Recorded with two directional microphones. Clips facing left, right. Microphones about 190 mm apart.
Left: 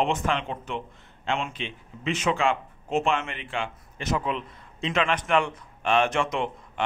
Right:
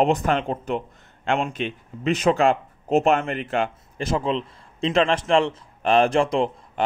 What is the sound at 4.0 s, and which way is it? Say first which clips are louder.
Speech: right 4 dB; 30° right (ahead or behind).